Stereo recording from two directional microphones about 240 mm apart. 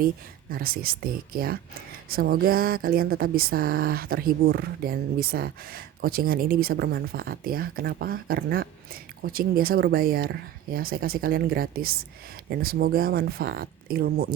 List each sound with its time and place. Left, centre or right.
0.5 s speech: right